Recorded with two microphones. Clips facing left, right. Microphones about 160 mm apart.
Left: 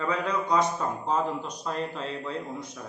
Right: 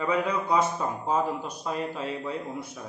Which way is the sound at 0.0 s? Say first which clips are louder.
Right 2 dB; 5° right (ahead or behind).